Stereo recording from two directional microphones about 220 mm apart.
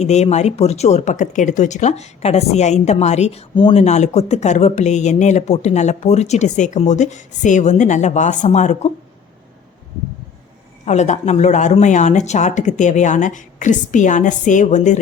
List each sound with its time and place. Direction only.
0.0 s speech: 30° left (ahead or behind)
10.8 s speech: 30° left (ahead or behind)